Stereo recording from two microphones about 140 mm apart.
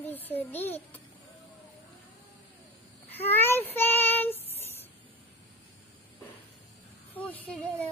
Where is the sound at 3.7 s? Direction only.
15° left (ahead or behind).